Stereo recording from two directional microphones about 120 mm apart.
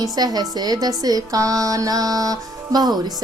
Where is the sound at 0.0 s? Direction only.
35° right (ahead or behind).